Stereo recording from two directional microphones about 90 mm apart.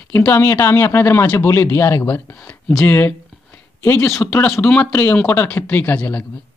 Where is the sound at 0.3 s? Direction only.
30° left (ahead or behind).